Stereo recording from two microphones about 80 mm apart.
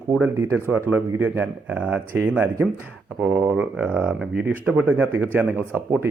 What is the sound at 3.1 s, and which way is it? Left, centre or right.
A man's voice, centre.